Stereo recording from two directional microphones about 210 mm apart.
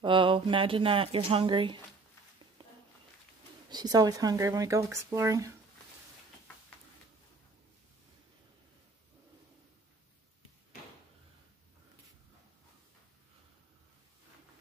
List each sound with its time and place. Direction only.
0.0 s speech: 25° right (ahead or behind)
3.7 s speech: 20° right (ahead or behind)